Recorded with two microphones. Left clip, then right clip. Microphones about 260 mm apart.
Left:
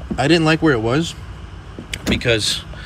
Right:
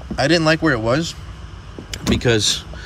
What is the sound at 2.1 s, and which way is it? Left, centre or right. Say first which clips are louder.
Speech: right 1 dB; centre.